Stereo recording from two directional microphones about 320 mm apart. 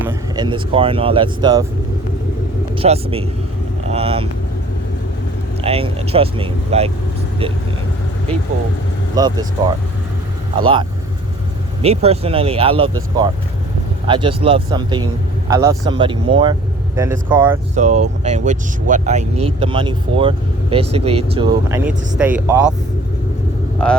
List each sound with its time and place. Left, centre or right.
0.1 s speech: centre
2.7 s speech: centre
5.6 s speech: centre
9.1 s speech: centre
17.7 s speech: right